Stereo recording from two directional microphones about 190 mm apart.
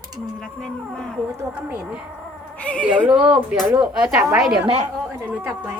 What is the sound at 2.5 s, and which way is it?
Speech, 5° left (ahead or behind).